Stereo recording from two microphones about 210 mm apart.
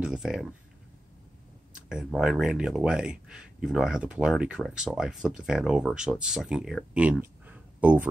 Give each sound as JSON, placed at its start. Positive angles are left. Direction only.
{"t": 0.0, "sound": "speech", "side_deg": -5}
{"t": 1.9, "sound": "speech", "side_deg": -5}